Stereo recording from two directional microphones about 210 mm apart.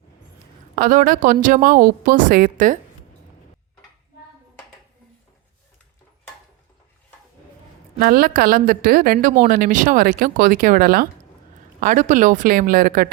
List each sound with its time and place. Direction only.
0.8 s a woman's voice: 40° right (ahead or behind)
7.9 s a woman's voice: 45° right (ahead or behind)